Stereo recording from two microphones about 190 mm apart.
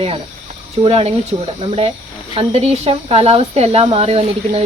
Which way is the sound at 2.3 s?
30° right (ahead or behind).